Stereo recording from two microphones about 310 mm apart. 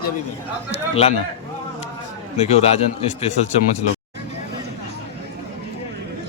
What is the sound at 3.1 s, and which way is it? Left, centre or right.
Speech, left.